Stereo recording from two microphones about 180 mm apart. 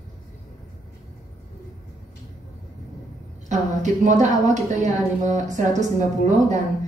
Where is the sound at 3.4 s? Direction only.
40° right (ahead or behind).